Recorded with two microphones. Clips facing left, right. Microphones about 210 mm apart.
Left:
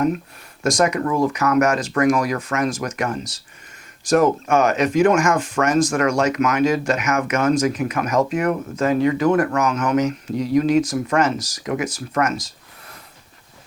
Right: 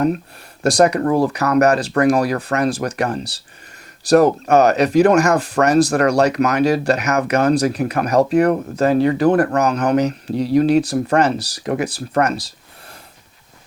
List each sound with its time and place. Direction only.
0.6 s speech: 35° right (ahead or behind)